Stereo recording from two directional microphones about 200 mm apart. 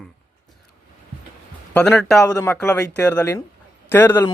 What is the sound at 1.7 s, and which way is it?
Speech, 5° left (ahead or behind).